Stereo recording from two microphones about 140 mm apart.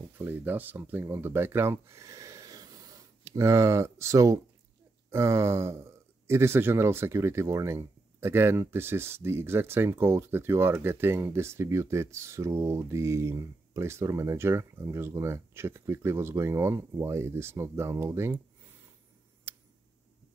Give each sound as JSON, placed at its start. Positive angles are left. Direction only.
{"t": 0.2, "sound": "speech", "side_deg": -15}
{"t": 19.5, "sound": "tick", "side_deg": -20}